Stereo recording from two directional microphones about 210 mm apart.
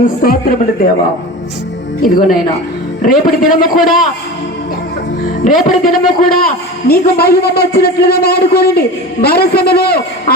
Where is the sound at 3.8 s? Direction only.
Centre (ahead or behind).